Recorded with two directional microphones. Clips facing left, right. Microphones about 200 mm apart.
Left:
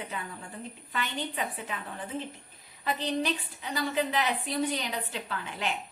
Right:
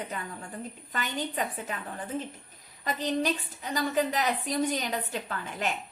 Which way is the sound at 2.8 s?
45° right (ahead or behind).